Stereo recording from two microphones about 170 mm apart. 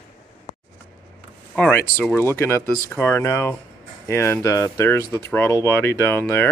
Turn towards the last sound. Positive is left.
turn(degrees=15)  # may be behind; listen again after turning